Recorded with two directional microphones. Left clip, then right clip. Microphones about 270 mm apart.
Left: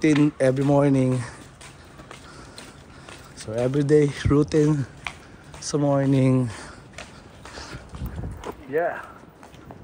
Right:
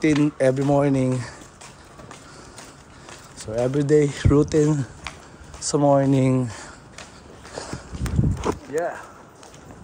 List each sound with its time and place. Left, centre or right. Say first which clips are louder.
0.0 s speech: even; centre
3.3 s speech: right 1 dB; centre
5.7 s speech: right 4 dB; centre
8.4 s clip-clop: left 1 dB; centre